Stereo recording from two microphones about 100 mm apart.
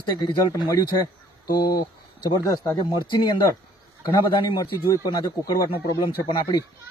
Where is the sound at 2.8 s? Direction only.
50° left (ahead or behind).